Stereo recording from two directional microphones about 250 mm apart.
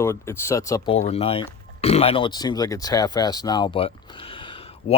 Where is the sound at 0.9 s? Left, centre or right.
Left.